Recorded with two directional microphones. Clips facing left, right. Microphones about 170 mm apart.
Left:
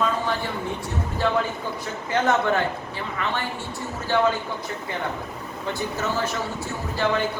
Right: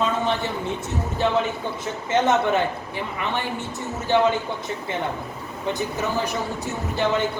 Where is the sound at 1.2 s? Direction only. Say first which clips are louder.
Right 1 dB; 20° right (ahead or behind).